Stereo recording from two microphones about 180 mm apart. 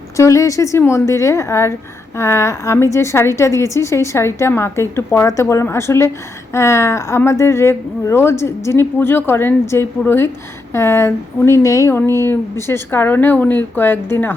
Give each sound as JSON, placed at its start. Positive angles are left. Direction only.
{"t": 0.2, "sound": "a woman's voice", "side_deg": 15}